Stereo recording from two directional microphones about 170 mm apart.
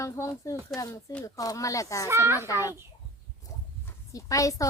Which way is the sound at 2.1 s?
15° right (ahead or behind).